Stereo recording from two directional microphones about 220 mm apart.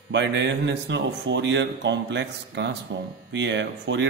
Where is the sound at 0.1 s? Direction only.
55° right (ahead or behind).